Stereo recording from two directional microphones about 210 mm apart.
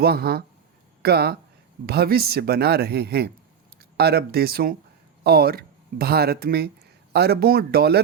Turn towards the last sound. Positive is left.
turn(degrees=-50)  # may be behind; listen again after turning